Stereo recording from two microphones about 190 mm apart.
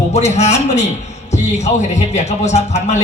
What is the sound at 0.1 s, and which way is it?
A man's voice, 35° left (ahead or behind).